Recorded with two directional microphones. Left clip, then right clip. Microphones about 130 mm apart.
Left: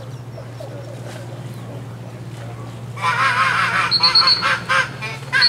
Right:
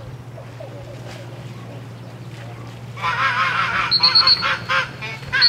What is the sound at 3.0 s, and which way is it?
Honk, 25° left (ahead or behind).